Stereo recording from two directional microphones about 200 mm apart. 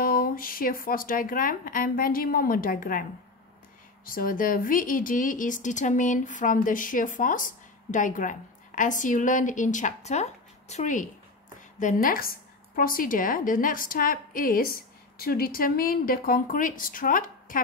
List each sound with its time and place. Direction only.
0.0 s speech: 45° left (ahead or behind)